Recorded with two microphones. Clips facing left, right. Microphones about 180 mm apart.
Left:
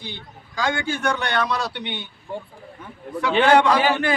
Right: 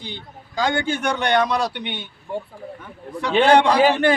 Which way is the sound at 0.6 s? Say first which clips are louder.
Right 2 dB; 20° right (ahead or behind).